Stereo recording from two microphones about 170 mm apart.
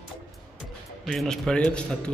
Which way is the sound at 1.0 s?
Centre (ahead or behind).